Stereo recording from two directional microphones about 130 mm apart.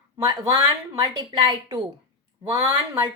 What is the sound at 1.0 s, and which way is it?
A woman's voice, 30° right (ahead or behind).